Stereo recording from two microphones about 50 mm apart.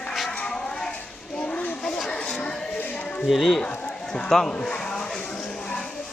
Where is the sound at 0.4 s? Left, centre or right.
Centre.